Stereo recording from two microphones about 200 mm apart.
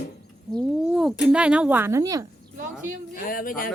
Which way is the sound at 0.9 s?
5° right (ahead or behind).